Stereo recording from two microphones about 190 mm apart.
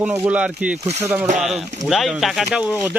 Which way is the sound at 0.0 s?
5° right (ahead or behind).